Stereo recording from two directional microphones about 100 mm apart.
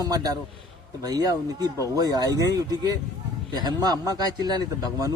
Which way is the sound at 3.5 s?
45° right (ahead or behind).